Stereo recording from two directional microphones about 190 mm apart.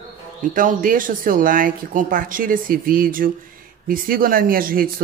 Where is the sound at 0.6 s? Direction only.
45° right (ahead or behind).